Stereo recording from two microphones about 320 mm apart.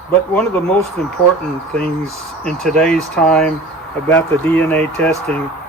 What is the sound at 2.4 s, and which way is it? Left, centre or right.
Speech, centre.